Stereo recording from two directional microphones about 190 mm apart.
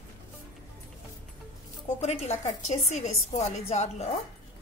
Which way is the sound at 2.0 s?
35° left (ahead or behind).